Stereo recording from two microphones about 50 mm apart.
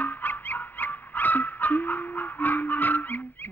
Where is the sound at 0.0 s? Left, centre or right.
Left.